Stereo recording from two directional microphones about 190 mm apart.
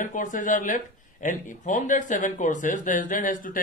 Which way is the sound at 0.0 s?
45° left (ahead or behind).